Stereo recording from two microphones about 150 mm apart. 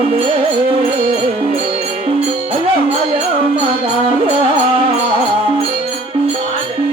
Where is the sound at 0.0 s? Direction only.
40° right (ahead or behind).